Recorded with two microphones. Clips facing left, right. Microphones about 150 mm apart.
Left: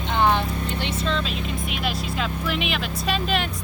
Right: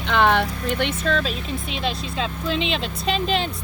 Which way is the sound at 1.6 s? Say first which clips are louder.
Even; 25° right (ahead or behind).